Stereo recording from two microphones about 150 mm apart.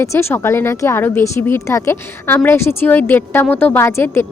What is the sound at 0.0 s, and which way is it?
Speech, 20° left (ahead or behind).